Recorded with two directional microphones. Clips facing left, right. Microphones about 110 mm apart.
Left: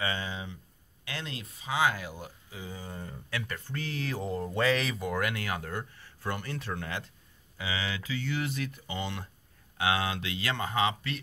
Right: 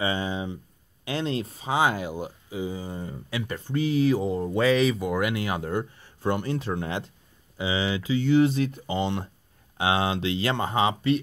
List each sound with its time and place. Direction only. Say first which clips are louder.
0.0 s a sound: right 7 dB; 20° right (ahead or behind)
1.0 s speech: right 12 dB; 25° right (ahead or behind)
3.8 s speech: right 13 dB; 10° right (ahead or behind); by 11.1 s 25° right (ahead or behind)